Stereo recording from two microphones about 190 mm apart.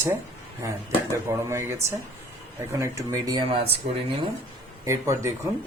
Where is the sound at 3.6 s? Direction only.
30° right (ahead or behind).